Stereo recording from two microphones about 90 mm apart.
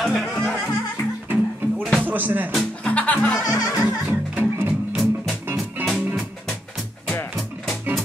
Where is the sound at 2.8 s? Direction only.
15° left (ahead or behind).